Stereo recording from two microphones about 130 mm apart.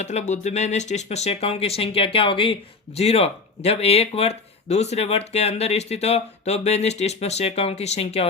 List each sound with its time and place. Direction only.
0.0 s speech: 60° left (ahead or behind)